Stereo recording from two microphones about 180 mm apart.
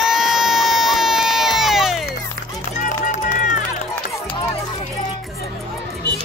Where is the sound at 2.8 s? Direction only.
45° left (ahead or behind).